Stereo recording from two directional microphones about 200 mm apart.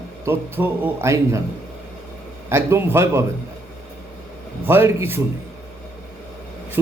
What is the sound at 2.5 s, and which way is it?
Speech, 15° right (ahead or behind).